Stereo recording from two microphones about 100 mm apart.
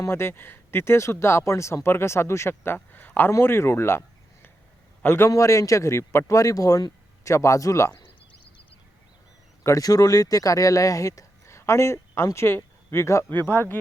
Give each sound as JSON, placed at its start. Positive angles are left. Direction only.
{"t": 0.0, "sound": "speech", "side_deg": 25}
{"t": 5.0, "sound": "speech", "side_deg": 25}
{"t": 9.6, "sound": "speech", "side_deg": 35}